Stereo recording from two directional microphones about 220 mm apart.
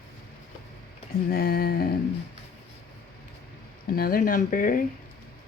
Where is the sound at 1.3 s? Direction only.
45° left (ahead or behind).